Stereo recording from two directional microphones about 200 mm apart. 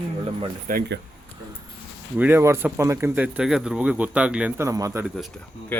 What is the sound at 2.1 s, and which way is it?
Speech, 10° right (ahead or behind).